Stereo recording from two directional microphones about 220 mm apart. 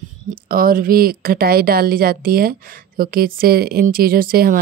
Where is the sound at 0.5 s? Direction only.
40° right (ahead or behind).